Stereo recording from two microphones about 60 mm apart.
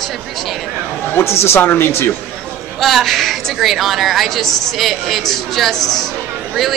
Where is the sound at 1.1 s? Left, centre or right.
Left.